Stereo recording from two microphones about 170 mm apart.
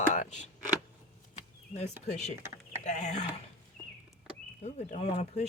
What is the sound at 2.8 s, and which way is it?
Speech, 45° left (ahead or behind).